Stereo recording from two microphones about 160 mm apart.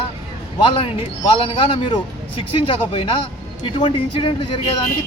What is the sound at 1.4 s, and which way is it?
Speech, 35° left (ahead or behind).